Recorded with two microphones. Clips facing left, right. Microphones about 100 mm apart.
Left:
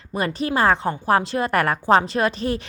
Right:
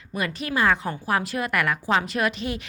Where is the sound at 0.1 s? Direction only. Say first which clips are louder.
Left 5 dB; 30° left (ahead or behind).